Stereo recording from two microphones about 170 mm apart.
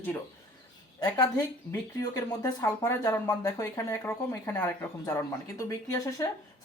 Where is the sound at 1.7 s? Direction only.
20° left (ahead or behind).